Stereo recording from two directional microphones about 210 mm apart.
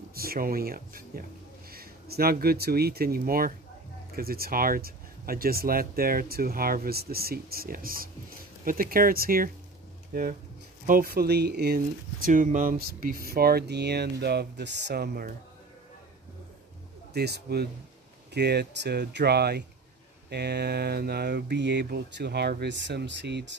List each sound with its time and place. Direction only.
0.1 s speech: 45° right (ahead or behind)
10.9 s speech: 45° right (ahead or behind)
17.1 s speech: 50° right (ahead or behind)